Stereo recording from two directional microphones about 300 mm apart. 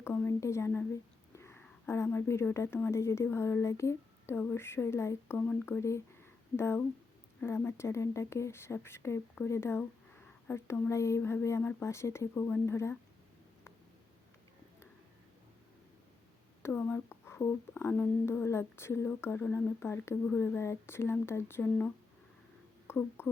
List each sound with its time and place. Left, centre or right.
0.0 s speech: centre
16.6 s speech: centre